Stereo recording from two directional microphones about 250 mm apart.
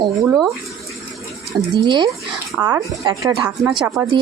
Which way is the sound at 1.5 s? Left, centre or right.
Centre.